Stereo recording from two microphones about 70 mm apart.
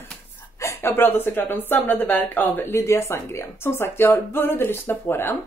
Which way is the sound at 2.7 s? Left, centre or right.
Left.